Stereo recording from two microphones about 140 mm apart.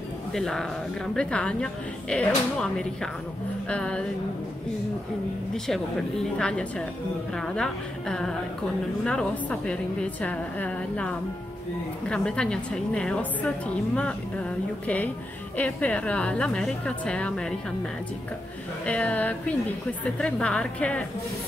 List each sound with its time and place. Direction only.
0.3 s a woman's voice: 5° left (ahead or behind)
5.5 s a woman's voice: 5° left (ahead or behind)
15.5 s a woman's voice: 10° left (ahead or behind)
18.9 s a woman's voice: 10° left (ahead or behind)